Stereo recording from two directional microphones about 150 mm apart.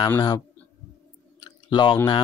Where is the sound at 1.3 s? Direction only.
30° left (ahead or behind).